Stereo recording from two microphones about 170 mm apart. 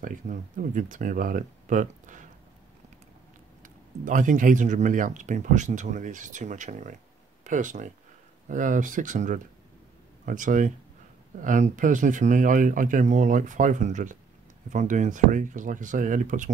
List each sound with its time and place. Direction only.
0.0 s speech: 50° right (ahead or behind)
3.6 s speech: 50° right (ahead or behind)